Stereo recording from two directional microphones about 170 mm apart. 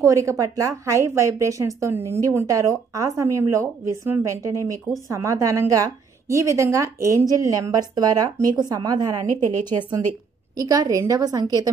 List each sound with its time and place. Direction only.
0.0 s a woman's voice: 20° right (ahead or behind)